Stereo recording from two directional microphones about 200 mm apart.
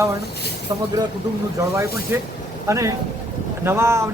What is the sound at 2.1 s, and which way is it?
Speech, 10° right (ahead or behind).